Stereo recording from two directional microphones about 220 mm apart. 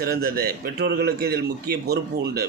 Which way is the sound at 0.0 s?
45° right (ahead or behind).